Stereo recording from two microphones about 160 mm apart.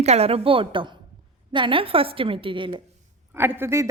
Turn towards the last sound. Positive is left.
turn(degrees=-15)  # may be behind; listen again after turning